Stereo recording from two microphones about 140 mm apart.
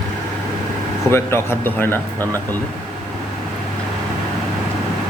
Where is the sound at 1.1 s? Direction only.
15° left (ahead or behind).